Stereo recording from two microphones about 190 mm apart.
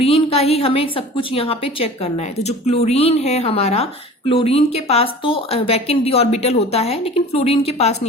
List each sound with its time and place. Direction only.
0.0 s a woman's voice: 30° left (ahead or behind)